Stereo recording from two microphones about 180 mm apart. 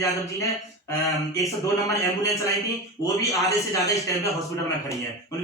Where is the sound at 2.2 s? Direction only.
15° left (ahead or behind).